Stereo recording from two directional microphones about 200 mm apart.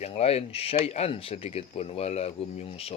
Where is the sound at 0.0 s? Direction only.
30° left (ahead or behind).